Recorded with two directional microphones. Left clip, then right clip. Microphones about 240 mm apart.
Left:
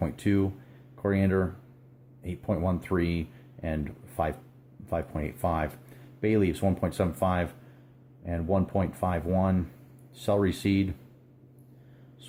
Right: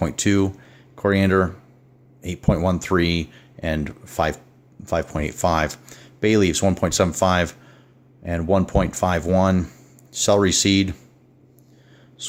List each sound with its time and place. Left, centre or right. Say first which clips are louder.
0.0 s speech: right 8 dB; right